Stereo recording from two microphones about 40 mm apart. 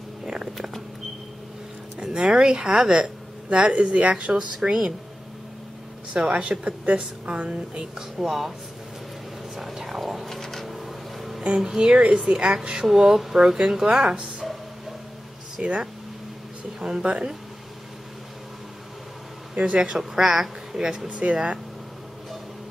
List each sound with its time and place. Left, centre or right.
0.2 s speech: centre
2.1 s speech: right
6.2 s speech: right
8.2 s speech: centre
9.6 s whispering: centre
10.7 s a sound: centre
11.4 s speech: right
12.8 s speech: centre
14.4 s a sound: centre
15.6 s speech: right
19.5 s speech: right
20.0 s speech: centre
21.1 s speech: right